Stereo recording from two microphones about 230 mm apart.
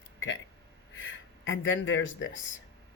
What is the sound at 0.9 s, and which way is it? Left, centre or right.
Speech, left.